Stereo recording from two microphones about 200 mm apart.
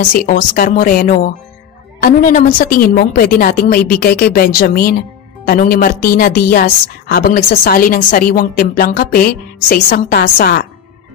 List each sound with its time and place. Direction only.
0.0 s a woman's voice: 45° left (ahead or behind)